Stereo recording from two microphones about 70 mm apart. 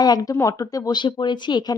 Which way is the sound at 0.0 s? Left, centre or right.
Left.